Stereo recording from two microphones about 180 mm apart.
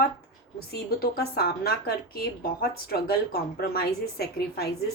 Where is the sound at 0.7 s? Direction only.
60° left (ahead or behind).